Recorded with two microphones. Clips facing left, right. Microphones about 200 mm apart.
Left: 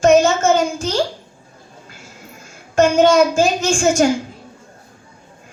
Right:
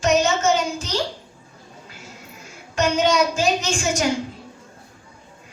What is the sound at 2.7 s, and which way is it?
A woman's voice, 50° left (ahead or behind).